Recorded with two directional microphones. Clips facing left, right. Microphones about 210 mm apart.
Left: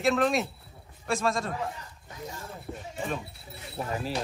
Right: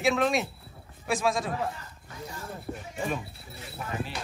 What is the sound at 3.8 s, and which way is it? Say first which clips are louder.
Speech: left 5 dB; 35° left (ahead or behind).